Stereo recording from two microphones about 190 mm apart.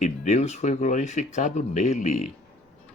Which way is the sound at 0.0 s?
35° left (ahead or behind).